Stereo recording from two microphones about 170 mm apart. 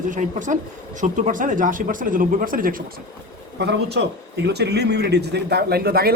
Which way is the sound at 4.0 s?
85° right.